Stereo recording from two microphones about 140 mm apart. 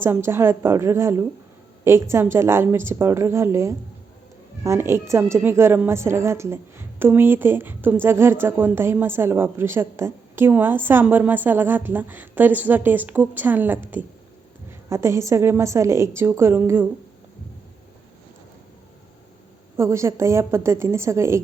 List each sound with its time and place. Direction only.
0.0 s a woman's voice: 15° right (ahead or behind)
19.7 s a woman's voice: 20° right (ahead or behind)